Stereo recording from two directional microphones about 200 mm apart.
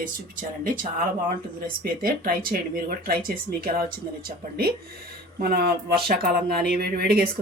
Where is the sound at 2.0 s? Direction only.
45° right (ahead or behind).